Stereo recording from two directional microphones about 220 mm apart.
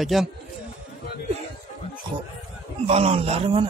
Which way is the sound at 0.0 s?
Centre (ahead or behind).